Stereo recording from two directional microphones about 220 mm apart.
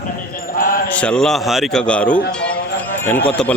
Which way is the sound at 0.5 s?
40° left (ahead or behind).